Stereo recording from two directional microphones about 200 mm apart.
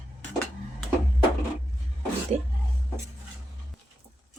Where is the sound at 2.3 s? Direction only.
35° right (ahead or behind).